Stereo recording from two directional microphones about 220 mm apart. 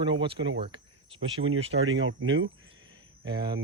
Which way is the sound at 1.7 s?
65° right (ahead or behind).